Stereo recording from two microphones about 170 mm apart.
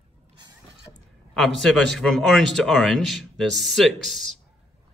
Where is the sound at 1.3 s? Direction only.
Centre (ahead or behind).